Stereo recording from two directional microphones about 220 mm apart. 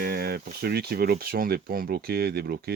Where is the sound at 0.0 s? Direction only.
45° right (ahead or behind).